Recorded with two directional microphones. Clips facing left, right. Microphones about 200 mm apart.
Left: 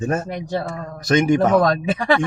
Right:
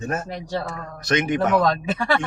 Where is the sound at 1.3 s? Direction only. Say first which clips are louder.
Left 2 dB; 50° left (ahead or behind).